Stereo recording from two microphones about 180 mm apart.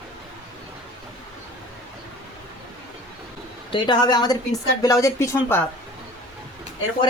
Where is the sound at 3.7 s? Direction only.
25° left (ahead or behind).